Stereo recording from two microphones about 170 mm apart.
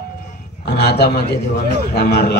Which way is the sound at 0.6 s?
70° left (ahead or behind).